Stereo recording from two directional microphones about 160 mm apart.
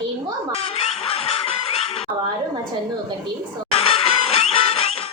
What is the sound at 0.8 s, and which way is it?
Music, 40° left (ahead or behind).